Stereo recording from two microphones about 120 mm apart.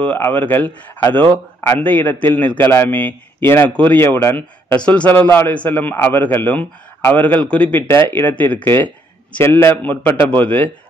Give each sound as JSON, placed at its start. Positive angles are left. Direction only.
{"t": 0.0, "sound": "a man's voice", "side_deg": 15}